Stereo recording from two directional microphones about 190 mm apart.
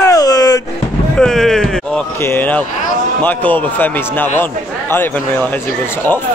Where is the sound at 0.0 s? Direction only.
20° left (ahead or behind).